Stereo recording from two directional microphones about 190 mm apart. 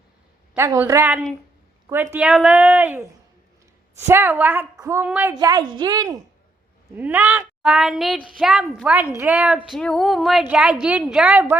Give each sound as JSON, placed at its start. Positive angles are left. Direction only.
{"t": 0.5, "sound": "a woman's voice", "side_deg": -15}
{"t": 4.0, "sound": "a woman's voice", "side_deg": -10}
{"t": 6.9, "sound": "a woman's voice", "side_deg": -10}